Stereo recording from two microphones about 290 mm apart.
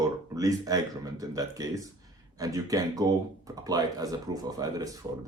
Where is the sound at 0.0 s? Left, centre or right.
Centre.